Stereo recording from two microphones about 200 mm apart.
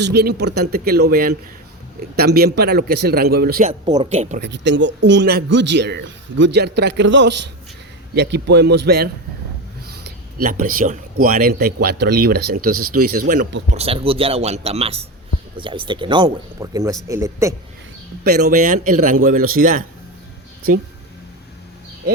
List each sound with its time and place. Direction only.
0.0 s speech: 55° right (ahead or behind)
3.6 s speech: 35° right (ahead or behind)
4.4 s speech: 60° right (ahead or behind); by 13.4 s 45° right (ahead or behind)
13.7 s speech: 30° right (ahead or behind); by 17.5 s 15° right (ahead or behind)
18.2 s speech: 55° right (ahead or behind)